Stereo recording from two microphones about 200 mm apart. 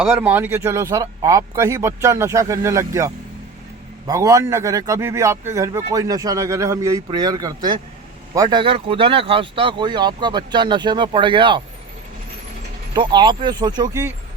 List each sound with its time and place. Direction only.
0.0 s a man's voice: 5° right (ahead or behind); by 11.6 s 25° right (ahead or behind)
12.9 s speech: 20° right (ahead or behind)